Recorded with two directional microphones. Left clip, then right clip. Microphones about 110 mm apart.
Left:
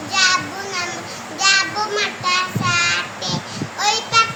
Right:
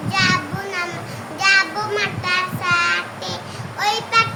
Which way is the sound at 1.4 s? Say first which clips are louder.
Even; 15° right (ahead or behind).